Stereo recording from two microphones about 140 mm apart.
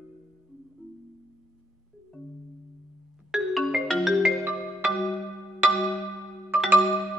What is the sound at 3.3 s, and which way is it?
Music, centre (ahead or behind).